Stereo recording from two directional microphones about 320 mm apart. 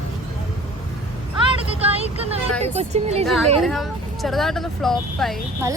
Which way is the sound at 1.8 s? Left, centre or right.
Centre.